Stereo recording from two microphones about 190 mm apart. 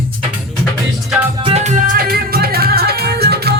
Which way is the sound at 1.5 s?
35° right (ahead or behind).